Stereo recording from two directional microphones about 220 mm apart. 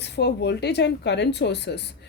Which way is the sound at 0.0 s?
50° left (ahead or behind).